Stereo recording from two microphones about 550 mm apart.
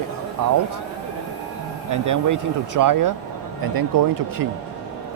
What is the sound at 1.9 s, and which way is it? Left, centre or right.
Speech, right.